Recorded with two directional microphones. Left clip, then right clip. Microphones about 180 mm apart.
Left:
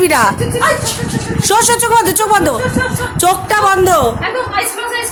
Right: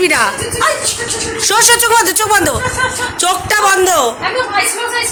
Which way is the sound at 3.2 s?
30° left (ahead or behind).